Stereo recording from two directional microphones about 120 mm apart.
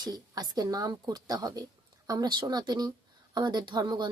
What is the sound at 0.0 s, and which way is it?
A woman's voice, 35° right (ahead or behind).